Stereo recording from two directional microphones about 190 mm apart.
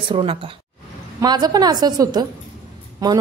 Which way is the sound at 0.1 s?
30° right (ahead or behind).